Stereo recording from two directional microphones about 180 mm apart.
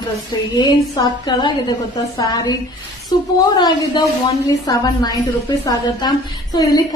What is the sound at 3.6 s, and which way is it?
A woman's voice, 20° left (ahead or behind).